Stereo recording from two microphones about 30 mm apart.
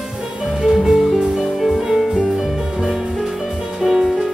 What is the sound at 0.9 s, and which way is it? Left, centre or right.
Music, centre.